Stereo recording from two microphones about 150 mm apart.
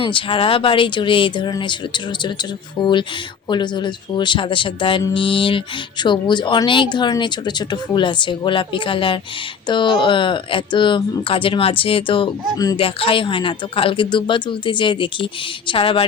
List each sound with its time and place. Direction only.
0.0 s speech: 35° left (ahead or behind)